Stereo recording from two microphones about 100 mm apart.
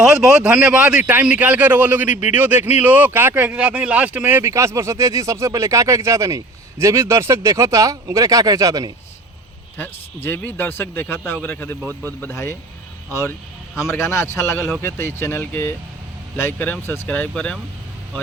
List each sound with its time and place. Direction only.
0.0 s a man's voice: 10° right (ahead or behind); by 8.9 s 35° right (ahead or behind)
9.7 s speech: 20° left (ahead or behind)
17.3 s speech: 10° left (ahead or behind)